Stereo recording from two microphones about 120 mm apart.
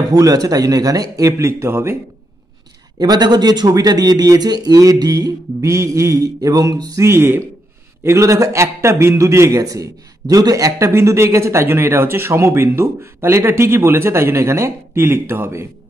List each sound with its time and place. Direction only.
0.1 s a man's voice: 30° right (ahead or behind)
3.0 s a man's voice: 35° right (ahead or behind); by 15.6 s 20° right (ahead or behind)